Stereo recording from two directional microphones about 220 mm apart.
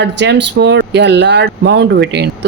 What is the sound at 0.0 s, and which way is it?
Speech, 50° right (ahead or behind).